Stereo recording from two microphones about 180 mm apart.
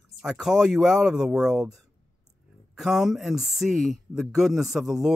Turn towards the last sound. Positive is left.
turn(degrees=-5)  # may be behind; listen again after turning